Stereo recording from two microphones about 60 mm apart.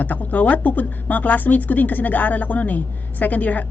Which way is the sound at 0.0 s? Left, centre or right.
Left.